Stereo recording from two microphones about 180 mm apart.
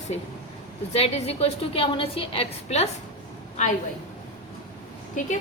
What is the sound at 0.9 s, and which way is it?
A woman's voice, 35° left (ahead or behind).